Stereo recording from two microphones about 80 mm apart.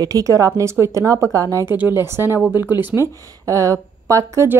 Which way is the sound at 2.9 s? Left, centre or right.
Right.